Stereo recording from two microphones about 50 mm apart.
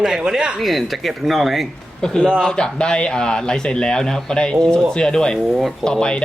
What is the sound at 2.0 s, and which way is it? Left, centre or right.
Speech, centre.